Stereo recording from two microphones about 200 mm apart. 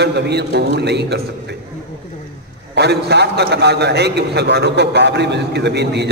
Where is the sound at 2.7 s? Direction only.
55° right (ahead or behind).